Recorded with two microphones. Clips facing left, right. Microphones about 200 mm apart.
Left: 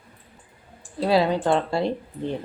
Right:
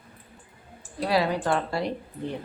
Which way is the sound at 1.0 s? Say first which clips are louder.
Left 4 dB; 25° left (ahead or behind).